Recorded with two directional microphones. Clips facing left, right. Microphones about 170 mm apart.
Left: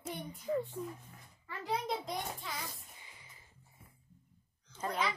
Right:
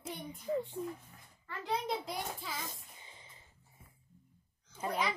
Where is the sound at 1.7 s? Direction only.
Centre (ahead or behind).